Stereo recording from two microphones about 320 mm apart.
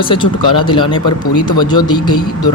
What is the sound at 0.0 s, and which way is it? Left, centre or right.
Speech, centre.